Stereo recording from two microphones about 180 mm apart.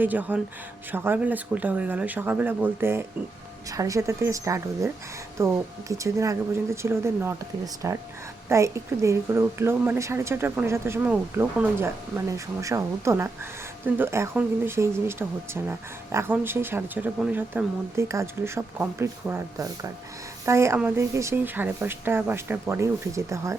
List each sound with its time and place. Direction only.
0.0 s a woman's voice: 10° right (ahead or behind)